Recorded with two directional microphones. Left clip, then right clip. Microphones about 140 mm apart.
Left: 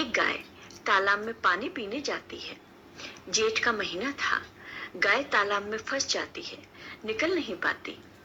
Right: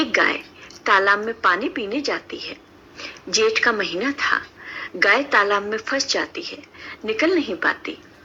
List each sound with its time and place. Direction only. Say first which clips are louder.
0.0 s speech: right 8 dB; 45° right (ahead or behind)